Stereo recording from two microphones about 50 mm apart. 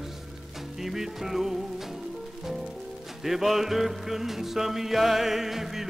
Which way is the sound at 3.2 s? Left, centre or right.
Centre.